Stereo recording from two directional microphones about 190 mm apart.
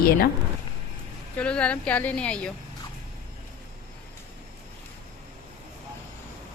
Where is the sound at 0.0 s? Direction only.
50° left (ahead or behind).